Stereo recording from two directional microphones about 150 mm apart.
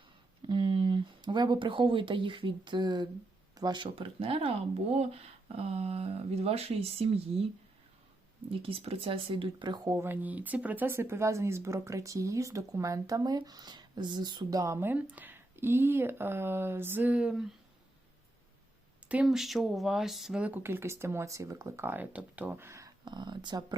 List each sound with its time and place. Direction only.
0.4 s speech: 35° right (ahead or behind)
8.4 s speech: 40° right (ahead or behind); by 17.4 s 5° right (ahead or behind)
19.0 s speech: 5° right (ahead or behind); by 23.7 s 30° right (ahead or behind)